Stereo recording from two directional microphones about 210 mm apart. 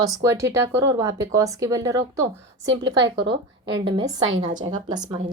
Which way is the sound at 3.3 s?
55° right (ahead or behind).